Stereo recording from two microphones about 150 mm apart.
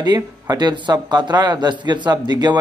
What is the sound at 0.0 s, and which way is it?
Speech, 30° right (ahead or behind).